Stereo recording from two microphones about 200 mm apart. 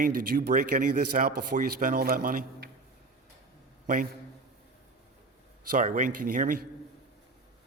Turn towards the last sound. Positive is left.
turn(degrees=-45)  # may be behind; listen again after turning